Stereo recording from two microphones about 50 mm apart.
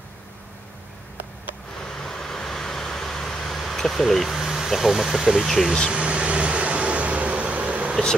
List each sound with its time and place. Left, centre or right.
1.8 s vehicle: centre
5.9 s vehicle: right